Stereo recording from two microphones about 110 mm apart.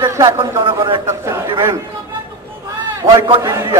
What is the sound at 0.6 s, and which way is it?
Speech, 50° right (ahead or behind).